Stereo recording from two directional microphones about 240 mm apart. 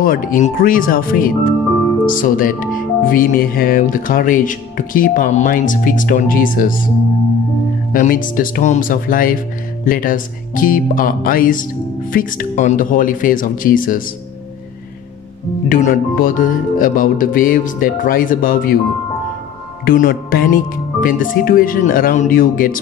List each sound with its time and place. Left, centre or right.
0.0 s speech: left
7.9 s speech: left
15.7 s speech: left
19.8 s speech: left